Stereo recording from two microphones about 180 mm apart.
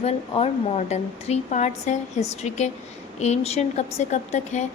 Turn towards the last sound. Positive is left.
turn(degrees=40)  # may be behind; listen again after turning